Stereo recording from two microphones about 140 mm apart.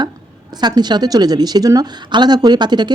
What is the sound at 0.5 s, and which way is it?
A woman's voice, 30° right (ahead or behind).